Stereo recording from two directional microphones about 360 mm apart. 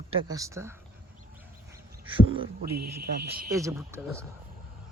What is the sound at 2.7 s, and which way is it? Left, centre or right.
Speech, right.